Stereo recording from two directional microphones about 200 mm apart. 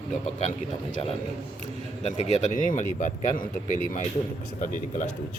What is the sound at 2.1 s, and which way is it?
Speech, 35° left (ahead or behind).